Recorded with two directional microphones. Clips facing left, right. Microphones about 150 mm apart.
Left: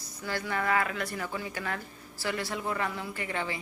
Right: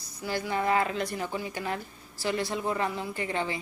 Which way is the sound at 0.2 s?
15° right (ahead or behind).